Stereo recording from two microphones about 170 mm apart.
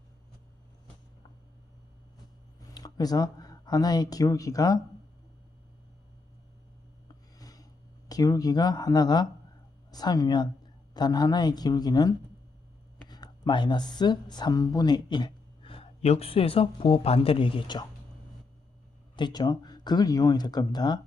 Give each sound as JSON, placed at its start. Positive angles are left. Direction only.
{"t": 2.6, "sound": "speech", "side_deg": 20}
{"t": 7.3, "sound": "a sound", "side_deg": 20}
{"t": 9.9, "sound": "speech", "side_deg": 25}
{"t": 19.1, "sound": "speech", "side_deg": 25}